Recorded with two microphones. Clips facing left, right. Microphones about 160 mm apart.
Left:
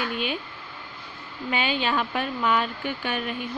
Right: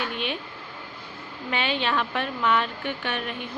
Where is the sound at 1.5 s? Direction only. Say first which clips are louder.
Left 1 dB; 5° left (ahead or behind).